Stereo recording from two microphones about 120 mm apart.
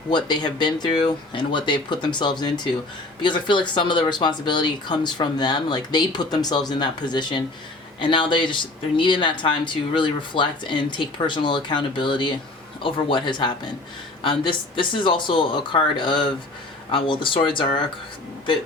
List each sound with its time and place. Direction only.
0.1 s speech: 40° left (ahead or behind)